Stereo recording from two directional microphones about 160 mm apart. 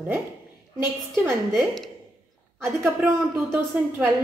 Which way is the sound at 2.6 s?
15° right (ahead or behind).